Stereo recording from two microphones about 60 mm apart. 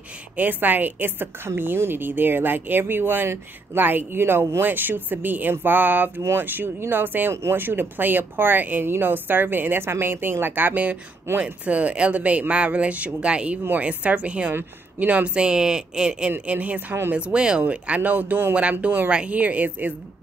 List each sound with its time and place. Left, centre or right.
0.4 s a woman's voice: right